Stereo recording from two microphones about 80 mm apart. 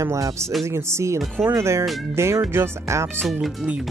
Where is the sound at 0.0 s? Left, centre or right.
Right.